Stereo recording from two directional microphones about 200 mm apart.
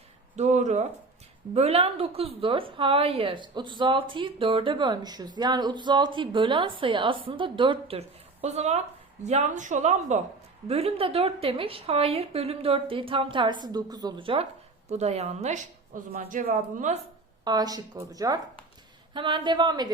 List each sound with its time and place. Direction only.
0.3 s a woman's voice: 35° right (ahead or behind)
17.4 s a woman's voice: 20° right (ahead or behind)